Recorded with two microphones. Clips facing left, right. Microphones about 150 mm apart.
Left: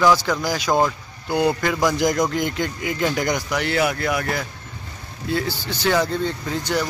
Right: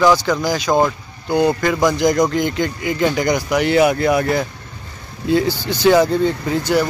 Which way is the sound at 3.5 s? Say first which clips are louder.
Right 7 dB; 15° right (ahead or behind).